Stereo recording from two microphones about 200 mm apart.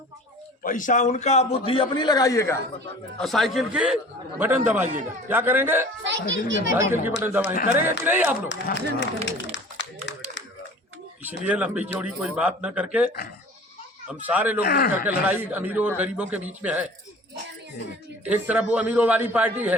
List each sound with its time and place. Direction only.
0.6 s a man's voice: 40° left (ahead or behind); by 2.6 s 15° left (ahead or behind)
3.2 s a man's voice: centre (ahead or behind)
6.0 s speech: 65° right (ahead or behind)
7.2 s speech: 10° right (ahead or behind)
8.4 s speech: 60° left (ahead or behind)
9.2 s clapping: 65° left (ahead or behind)
11.2 s speech: 10° right (ahead or behind)
14.6 s a man's voice: 50° left (ahead or behind)
15.3 s speech: 10° right (ahead or behind)
18.3 s speech: 5° right (ahead or behind)